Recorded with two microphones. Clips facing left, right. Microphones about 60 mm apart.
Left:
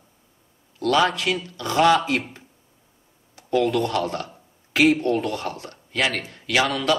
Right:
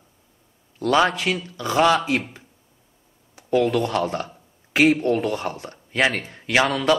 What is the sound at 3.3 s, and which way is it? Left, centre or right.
A man's voice, right.